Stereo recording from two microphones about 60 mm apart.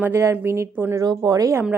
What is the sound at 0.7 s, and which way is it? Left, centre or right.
Speech, right.